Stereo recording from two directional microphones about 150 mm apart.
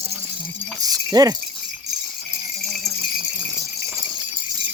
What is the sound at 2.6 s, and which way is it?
Jingle bell, centre (ahead or behind).